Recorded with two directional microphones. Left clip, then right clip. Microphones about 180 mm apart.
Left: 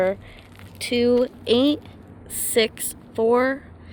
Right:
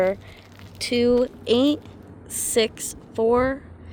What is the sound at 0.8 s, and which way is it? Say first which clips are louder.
Speech: even; 5° right (ahead or behind).